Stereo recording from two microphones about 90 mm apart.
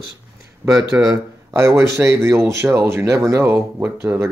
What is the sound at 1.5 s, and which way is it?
Speech, 30° right (ahead or behind).